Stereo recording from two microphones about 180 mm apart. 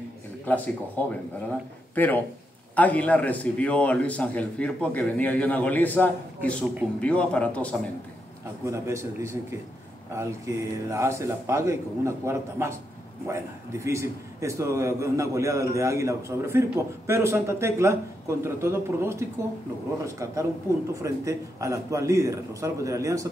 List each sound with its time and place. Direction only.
2.0 s a man's voice: 10° left (ahead or behind)
8.6 s a man's voice: 15° right (ahead or behind)